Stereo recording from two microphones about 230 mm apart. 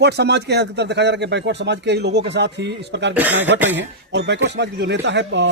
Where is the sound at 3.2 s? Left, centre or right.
Centre.